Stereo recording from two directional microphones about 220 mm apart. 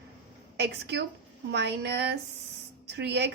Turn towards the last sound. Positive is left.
turn(degrees=-50)  # may be behind; listen again after turning